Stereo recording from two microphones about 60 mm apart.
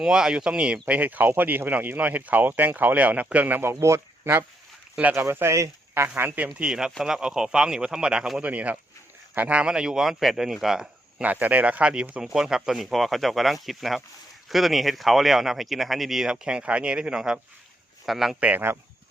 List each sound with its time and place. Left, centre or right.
0.0 s speech: centre
3.6 s speech: right
5.9 s speech: right
6.5 s speech: centre
8.4 s speech: right; by 10.8 s centre
11.2 s speech: right
12.2 s speech: centre
18.3 s speech: right